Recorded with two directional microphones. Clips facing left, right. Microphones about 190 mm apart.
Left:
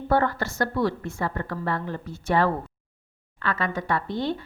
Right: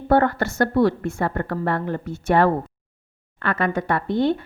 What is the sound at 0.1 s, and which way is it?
Speech, 55° right (ahead or behind).